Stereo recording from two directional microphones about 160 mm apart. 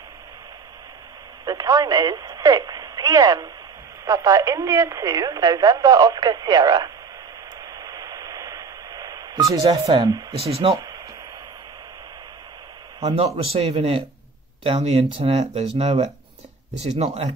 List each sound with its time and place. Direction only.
1.4 s speech: 25° right (ahead or behind)
7.6 s radio: 25° right (ahead or behind)
10.4 s speech: 40° right (ahead or behind)
10.7 s speech: 25° right (ahead or behind)
13.0 s speech: 40° right (ahead or behind)